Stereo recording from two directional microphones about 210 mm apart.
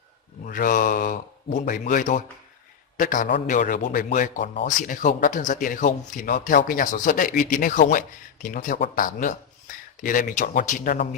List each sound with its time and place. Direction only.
0.4 s a man's voice: 40° left (ahead or behind)